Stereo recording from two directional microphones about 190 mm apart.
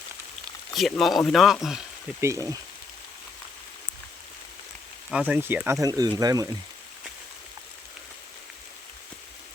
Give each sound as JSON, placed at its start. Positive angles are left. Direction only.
{"t": 0.7, "sound": "speech", "side_deg": 0}
{"t": 2.2, "sound": "speech", "side_deg": -15}
{"t": 5.1, "sound": "speech", "side_deg": -10}